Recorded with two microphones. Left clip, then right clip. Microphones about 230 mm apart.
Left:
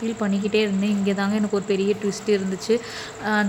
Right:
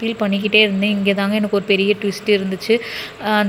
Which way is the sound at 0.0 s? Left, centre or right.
Centre.